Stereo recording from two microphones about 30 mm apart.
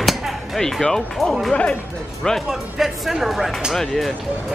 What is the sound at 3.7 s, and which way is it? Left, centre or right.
Speech, centre.